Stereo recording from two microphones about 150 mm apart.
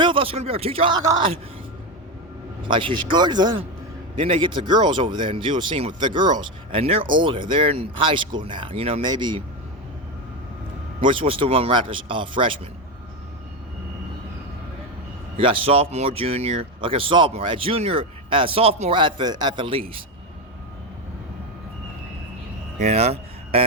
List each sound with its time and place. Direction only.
0.0 s speech: 35° right (ahead or behind)
2.6 s speech: 35° right (ahead or behind)
4.1 s speech: 45° right (ahead or behind)
11.0 s speech: 35° right (ahead or behind)
15.4 s speech: 35° right (ahead or behind)
22.8 s speech: 45° right (ahead or behind)